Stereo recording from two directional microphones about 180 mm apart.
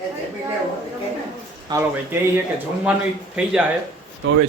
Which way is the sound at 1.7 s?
10° right (ahead or behind).